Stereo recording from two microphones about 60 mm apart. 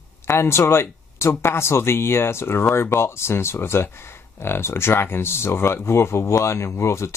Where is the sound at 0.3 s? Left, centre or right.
Left.